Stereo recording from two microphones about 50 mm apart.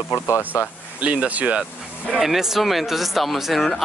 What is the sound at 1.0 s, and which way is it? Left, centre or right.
Speech, right.